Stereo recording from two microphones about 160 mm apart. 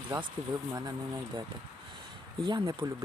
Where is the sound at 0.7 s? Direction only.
25° right (ahead or behind).